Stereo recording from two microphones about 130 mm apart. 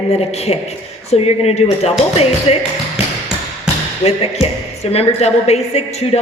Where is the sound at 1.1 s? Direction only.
55° left (ahead or behind).